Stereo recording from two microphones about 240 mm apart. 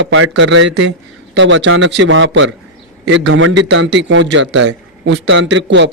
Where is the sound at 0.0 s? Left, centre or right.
Right.